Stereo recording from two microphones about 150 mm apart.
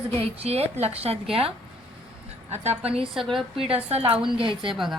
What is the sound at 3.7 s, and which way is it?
A woman's voice, 45° right (ahead or behind).